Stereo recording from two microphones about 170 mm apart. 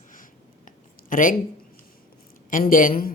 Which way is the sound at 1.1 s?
55° left (ahead or behind).